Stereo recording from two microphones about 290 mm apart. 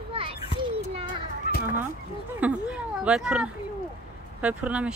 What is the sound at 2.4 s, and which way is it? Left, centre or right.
Speech, centre.